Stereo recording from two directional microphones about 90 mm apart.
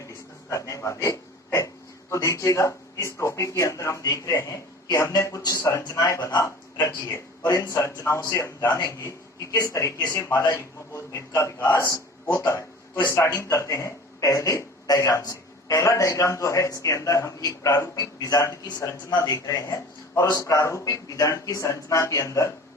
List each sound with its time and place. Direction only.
0.5 s a man's voice: 35° left (ahead or behind)